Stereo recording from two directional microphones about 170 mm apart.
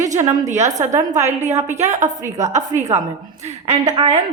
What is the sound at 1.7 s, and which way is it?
Speech, 45° right (ahead or behind).